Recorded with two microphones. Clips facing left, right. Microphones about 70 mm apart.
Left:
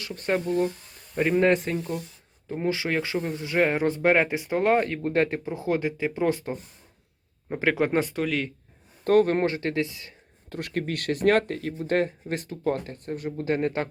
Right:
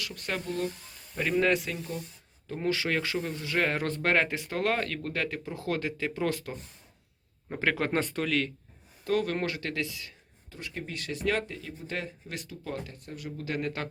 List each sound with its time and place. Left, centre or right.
0.0 s speech: left
2.5 s speech: centre
5.5 s speech: left
7.5 s speech: centre
9.0 s speech: left
10.5 s speech: left